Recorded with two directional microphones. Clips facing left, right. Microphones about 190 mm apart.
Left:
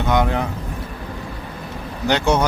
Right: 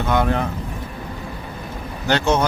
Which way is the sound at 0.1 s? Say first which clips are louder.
Left 1 dB; 15° left (ahead or behind).